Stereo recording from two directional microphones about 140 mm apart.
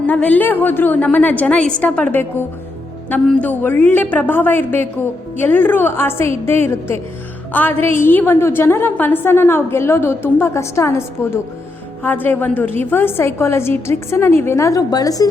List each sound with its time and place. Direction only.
0.1 s a woman's voice: 10° left (ahead or behind)
3.2 s a woman's voice: 10° left (ahead or behind)